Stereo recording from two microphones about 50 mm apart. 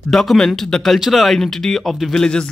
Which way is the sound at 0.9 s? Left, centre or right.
Centre.